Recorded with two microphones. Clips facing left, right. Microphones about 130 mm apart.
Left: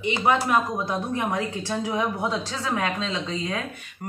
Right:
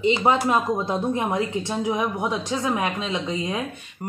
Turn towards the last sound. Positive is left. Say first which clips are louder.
# right 2 dB
turn(degrees=-15)  # may be behind; listen again after turning